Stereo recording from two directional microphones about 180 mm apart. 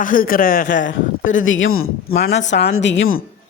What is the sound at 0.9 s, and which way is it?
Speech, 90° left.